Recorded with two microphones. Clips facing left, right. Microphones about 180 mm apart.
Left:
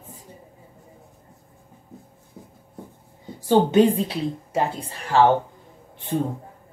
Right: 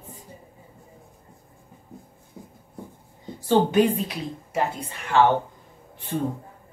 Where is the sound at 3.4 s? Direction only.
25° left (ahead or behind).